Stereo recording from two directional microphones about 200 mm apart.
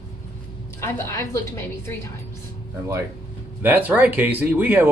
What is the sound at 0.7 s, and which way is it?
Female singing, 15° left (ahead or behind).